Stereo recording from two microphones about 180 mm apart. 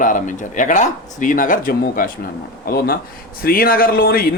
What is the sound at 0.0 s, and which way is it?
Speech, 45° left (ahead or behind).